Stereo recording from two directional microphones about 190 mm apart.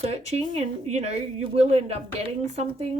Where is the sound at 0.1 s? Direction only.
35° right (ahead or behind).